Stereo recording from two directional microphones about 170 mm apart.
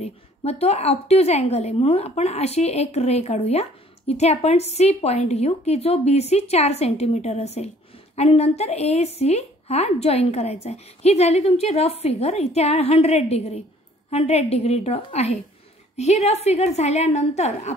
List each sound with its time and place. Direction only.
0.0 s a woman's voice: 40° left (ahead or behind)